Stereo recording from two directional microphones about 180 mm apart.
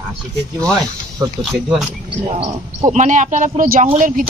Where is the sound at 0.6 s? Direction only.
20° right (ahead or behind).